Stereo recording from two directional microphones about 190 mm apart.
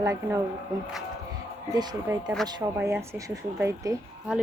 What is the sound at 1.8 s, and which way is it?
A woman's voice, 15° right (ahead or behind).